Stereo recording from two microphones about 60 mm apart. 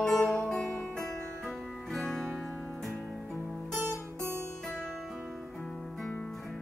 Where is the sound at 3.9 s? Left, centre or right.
Right.